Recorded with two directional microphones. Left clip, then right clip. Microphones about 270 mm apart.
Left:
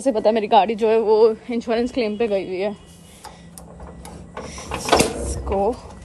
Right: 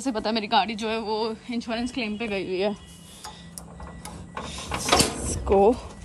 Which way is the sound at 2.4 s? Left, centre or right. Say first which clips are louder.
Left 2 dB; centre.